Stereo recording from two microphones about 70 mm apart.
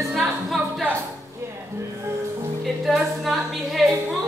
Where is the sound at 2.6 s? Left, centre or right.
Centre.